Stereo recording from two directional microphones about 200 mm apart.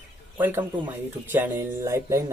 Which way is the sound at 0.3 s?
10° right (ahead or behind).